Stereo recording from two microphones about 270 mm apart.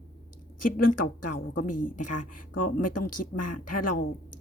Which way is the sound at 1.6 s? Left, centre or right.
Left.